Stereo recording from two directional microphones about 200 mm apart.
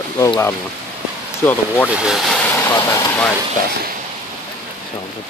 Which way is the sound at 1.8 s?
5° right (ahead or behind).